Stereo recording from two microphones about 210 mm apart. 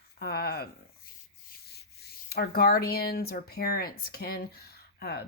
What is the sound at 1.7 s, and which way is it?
Rub, 50° left (ahead or behind).